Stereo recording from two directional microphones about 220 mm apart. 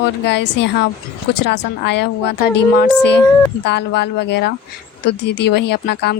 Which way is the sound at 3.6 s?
50° left (ahead or behind).